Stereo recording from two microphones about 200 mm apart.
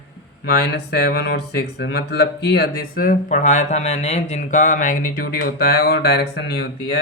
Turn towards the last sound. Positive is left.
turn(degrees=55)  # may be behind; listen again after turning